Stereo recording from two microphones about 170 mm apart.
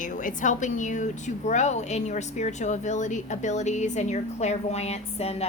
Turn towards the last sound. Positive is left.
turn(degrees=40)  # may be behind; listen again after turning